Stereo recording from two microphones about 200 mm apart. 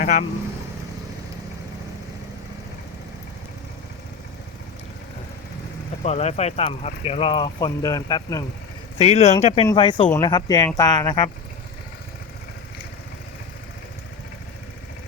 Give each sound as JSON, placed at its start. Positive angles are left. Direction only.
{"t": 0.0, "sound": "speech", "side_deg": 35}
{"t": 6.0, "sound": "speech", "side_deg": 30}
{"t": 9.0, "sound": "speech", "side_deg": 30}